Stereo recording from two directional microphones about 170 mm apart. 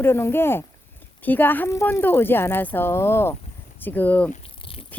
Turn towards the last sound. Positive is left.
turn(degrees=10)  # may be behind; listen again after turning